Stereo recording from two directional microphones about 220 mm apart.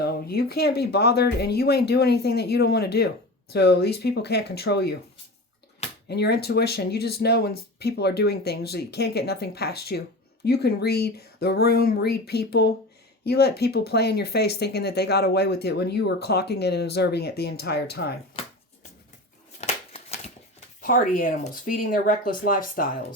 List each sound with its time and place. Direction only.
0.0 s speech: 45° left (ahead or behind)
6.1 s speech: 50° left (ahead or behind)
19.5 s a sound: 30° left (ahead or behind)
20.8 s speech: 40° left (ahead or behind)